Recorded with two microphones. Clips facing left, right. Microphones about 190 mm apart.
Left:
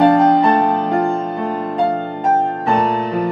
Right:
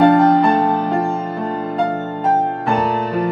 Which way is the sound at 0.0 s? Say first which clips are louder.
Even; centre (ahead or behind).